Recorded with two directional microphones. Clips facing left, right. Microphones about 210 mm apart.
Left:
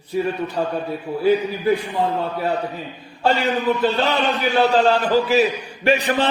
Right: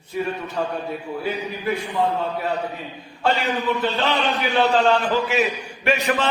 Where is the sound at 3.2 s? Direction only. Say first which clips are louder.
Left 3 dB; 35° left (ahead or behind).